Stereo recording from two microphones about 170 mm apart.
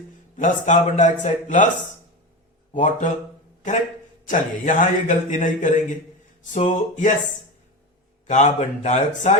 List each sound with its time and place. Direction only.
0.3 s a man's voice: 45° left (ahead or behind)
2.7 s a man's voice: 45° left (ahead or behind)
4.3 s a man's voice: 50° left (ahead or behind)
8.3 s a man's voice: 40° left (ahead or behind)